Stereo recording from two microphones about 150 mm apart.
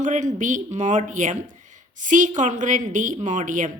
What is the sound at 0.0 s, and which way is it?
A woman's voice, 55° right (ahead or behind).